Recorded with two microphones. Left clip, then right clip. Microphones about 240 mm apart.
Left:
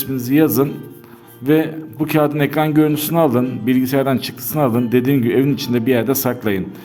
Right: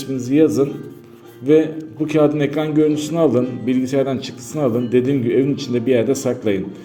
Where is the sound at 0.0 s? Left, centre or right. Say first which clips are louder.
Even; left.